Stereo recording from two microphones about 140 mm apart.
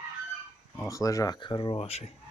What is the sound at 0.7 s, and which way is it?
Speech, 20° left (ahead or behind).